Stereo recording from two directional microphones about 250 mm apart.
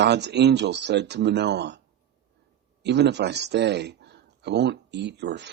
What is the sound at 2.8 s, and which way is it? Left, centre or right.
A man's voice, right.